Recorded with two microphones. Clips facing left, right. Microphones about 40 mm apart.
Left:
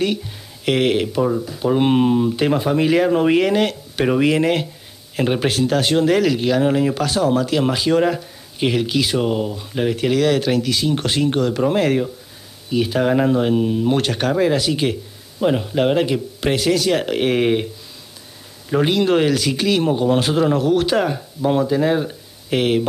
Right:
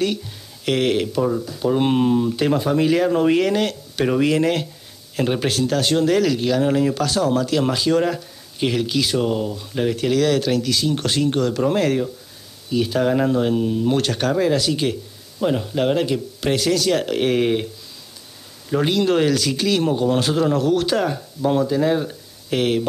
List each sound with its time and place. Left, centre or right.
0.0 s speech: centre
18.7 s speech: centre